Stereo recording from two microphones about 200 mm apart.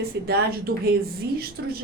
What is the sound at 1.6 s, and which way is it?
Speech, 60° right (ahead or behind).